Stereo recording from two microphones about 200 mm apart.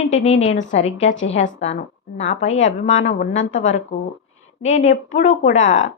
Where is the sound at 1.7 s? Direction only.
35° left (ahead or behind).